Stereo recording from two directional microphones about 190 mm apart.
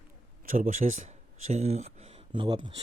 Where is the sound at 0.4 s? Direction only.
45° right (ahead or behind).